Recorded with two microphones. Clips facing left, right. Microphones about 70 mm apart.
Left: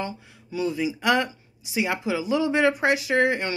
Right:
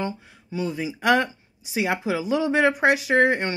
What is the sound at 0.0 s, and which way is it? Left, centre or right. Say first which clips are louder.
Speech: right 3 dB; right.